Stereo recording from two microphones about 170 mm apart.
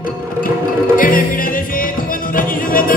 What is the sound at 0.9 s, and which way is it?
Music, 55° left (ahead or behind).